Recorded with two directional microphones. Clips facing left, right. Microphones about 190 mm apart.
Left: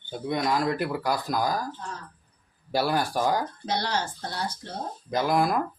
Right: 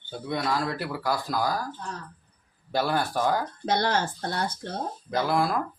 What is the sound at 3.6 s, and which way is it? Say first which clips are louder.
Speech: right 3 dB; 50° right (ahead or behind).